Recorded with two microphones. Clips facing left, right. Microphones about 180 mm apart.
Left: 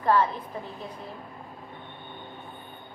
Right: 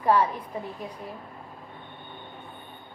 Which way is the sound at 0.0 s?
10° right (ahead or behind).